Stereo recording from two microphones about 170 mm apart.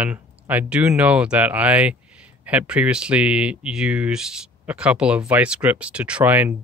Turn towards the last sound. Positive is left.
turn(degrees=-10)  # may be behind; listen again after turning